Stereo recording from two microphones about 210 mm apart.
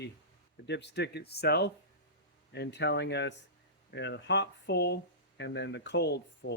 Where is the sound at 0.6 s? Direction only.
55° left (ahead or behind).